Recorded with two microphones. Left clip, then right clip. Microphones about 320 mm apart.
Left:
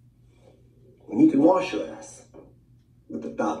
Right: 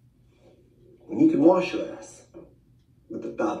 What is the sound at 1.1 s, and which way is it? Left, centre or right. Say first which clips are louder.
Speech: even; left.